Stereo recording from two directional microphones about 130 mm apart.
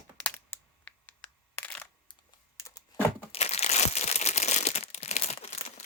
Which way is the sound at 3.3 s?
55° left (ahead or behind).